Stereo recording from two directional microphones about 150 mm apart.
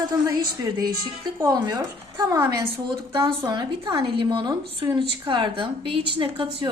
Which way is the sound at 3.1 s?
35° right (ahead or behind).